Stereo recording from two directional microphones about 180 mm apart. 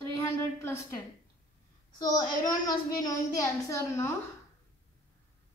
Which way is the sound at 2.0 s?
20° left (ahead or behind).